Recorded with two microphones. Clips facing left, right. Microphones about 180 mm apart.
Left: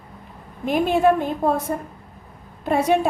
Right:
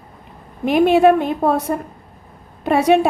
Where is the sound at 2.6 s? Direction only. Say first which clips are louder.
Right 5 dB; 75° right (ahead or behind).